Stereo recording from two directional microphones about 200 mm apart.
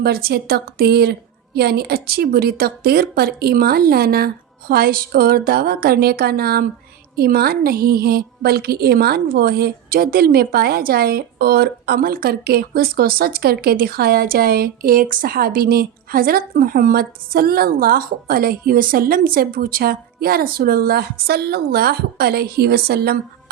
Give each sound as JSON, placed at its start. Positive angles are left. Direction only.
{"t": 0.0, "sound": "a woman's voice", "side_deg": -50}